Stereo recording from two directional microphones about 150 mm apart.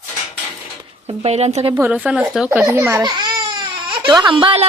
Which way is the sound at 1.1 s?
45° right (ahead or behind).